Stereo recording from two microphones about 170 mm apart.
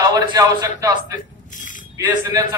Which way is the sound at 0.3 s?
20° right (ahead or behind).